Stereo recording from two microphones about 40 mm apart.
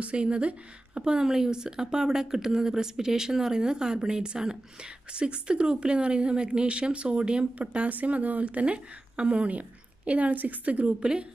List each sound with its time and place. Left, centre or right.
0.0 s speech: right
1.1 s speech: centre; by 8.7 s right
8.7 s a woman's voice: right
11.0 s speech: right